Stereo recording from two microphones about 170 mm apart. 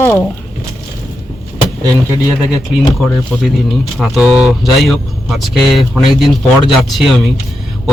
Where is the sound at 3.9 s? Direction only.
Centre (ahead or behind).